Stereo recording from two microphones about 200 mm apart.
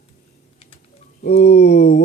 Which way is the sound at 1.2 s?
50° left (ahead or behind).